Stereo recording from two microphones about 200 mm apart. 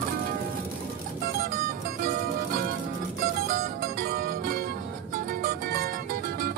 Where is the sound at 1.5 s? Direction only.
50° right (ahead or behind).